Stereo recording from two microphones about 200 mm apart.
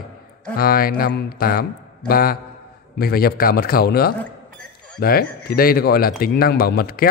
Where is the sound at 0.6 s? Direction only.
45° left (ahead or behind).